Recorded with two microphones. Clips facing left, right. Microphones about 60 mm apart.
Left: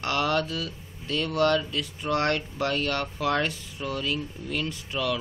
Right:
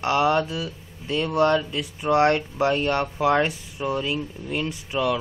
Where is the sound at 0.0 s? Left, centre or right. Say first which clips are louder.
Right 5 dB; centre.